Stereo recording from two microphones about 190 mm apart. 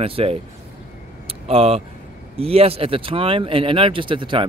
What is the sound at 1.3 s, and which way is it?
Vehicle, 30° right (ahead or behind).